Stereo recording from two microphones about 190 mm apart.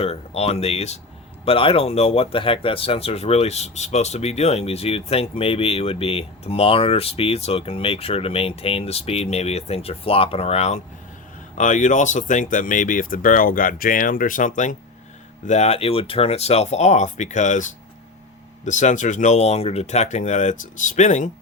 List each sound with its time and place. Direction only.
0.0 s speech: 30° left (ahead or behind)